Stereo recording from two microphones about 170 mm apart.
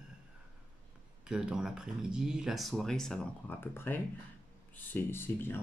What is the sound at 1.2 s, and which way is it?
Speech, 5° right (ahead or behind).